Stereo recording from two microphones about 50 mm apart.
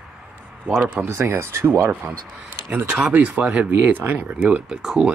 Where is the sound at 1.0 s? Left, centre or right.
Right.